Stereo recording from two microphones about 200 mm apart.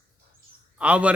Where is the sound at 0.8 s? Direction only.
5° right (ahead or behind).